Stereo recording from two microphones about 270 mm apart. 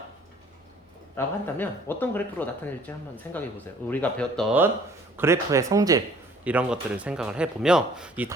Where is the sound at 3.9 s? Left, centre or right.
Centre.